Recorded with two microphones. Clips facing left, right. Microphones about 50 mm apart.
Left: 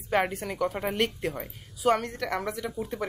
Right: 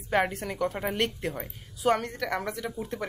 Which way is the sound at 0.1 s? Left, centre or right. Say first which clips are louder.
Even; centre.